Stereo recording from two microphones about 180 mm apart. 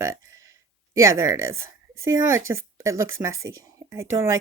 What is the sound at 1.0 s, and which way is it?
Speech, 20° right (ahead or behind).